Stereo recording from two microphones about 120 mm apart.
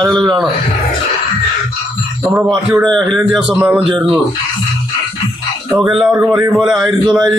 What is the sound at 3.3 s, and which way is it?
Speech, 10° right (ahead or behind).